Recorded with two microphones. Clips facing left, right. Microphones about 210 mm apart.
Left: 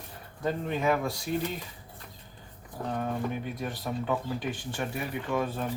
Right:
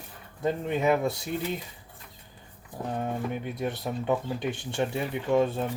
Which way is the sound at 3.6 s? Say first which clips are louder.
Right 3 dB; 20° right (ahead or behind).